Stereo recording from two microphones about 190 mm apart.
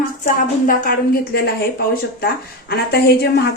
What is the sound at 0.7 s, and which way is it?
A woman's voice, 50° left (ahead or behind).